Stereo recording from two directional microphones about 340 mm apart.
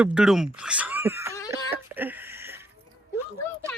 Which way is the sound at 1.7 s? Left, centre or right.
Centre.